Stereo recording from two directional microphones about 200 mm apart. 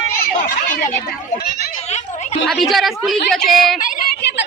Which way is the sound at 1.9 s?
35° left (ahead or behind).